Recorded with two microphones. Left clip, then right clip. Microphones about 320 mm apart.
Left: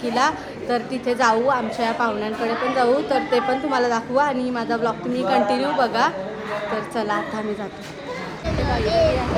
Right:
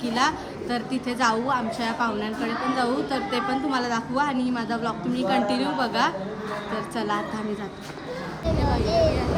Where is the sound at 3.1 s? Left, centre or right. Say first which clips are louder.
Left 6 dB; centre.